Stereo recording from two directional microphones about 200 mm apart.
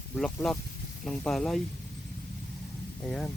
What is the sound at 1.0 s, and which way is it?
Speech, 5° left (ahead or behind).